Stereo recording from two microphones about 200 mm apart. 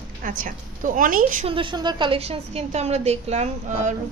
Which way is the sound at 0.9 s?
40° right (ahead or behind).